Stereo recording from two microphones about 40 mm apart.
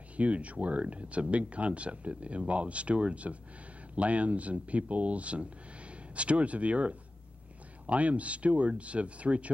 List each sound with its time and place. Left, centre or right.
0.2 s speech: right